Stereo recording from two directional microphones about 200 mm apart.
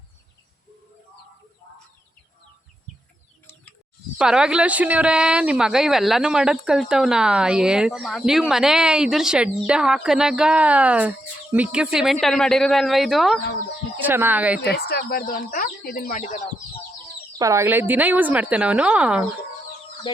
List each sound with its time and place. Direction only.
4.2 s a woman's voice: 5° right (ahead or behind)
14.6 s speech: 55° left (ahead or behind)
17.3 s a woman's voice: 15° right (ahead or behind)